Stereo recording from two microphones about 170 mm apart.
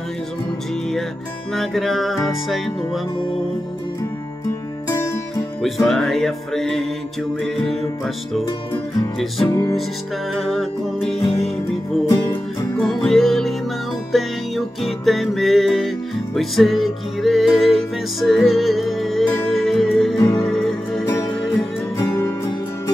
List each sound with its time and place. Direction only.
1.5 s music: centre (ahead or behind)
5.9 s music: centre (ahead or behind)
9.5 s music: 20° left (ahead or behind)
10.3 s music: centre (ahead or behind)
12.1 s music: 15° left (ahead or behind)
20.2 s music: 20° left (ahead or behind)
20.4 s music: centre (ahead or behind)
21.9 s music: 15° left (ahead or behind)